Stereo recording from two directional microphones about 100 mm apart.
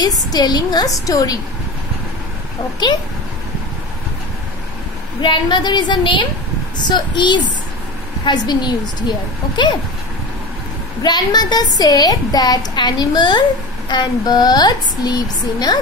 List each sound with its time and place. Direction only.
0.0 s a woman's voice: 40° left (ahead or behind)
5.2 s a woman's voice: 50° left (ahead or behind)
11.0 s a woman's voice: 40° left (ahead or behind)